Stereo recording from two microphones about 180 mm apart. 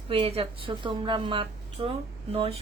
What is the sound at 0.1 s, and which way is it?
A woman's voice, 30° right (ahead or behind).